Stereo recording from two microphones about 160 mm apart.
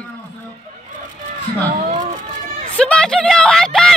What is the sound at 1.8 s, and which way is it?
Cat, 50° right (ahead or behind).